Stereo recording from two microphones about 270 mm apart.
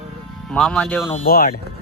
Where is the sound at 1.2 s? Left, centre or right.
Left.